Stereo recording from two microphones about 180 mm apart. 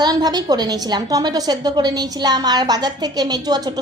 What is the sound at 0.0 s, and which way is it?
A woman's voice, 20° right (ahead or behind).